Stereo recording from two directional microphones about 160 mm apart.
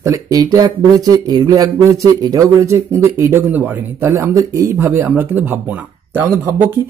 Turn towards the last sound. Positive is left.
turn(degrees=-15)  # may be behind; listen again after turning